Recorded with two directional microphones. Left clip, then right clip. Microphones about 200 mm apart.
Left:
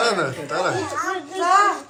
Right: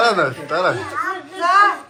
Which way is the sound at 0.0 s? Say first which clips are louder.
Right 5 dB; 5° left (ahead or behind).